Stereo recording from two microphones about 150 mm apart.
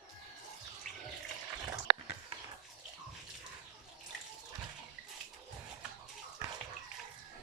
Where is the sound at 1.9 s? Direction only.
90° right.